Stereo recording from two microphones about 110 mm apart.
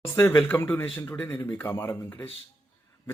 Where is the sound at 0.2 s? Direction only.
20° left (ahead or behind).